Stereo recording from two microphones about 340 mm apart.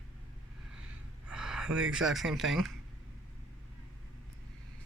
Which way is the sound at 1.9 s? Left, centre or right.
Centre.